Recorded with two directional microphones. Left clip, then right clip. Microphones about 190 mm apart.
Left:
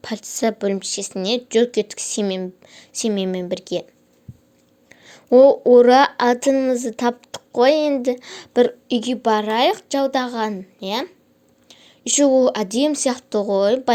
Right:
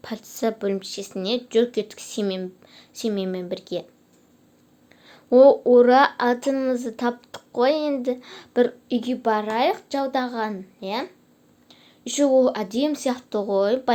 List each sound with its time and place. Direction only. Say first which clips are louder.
0.0 s speech: left 4 dB; 30° left (ahead or behind)
4.9 s speech: left 5 dB; 35° left (ahead or behind)
11.7 s speech: left 8 dB; 35° left (ahead or behind)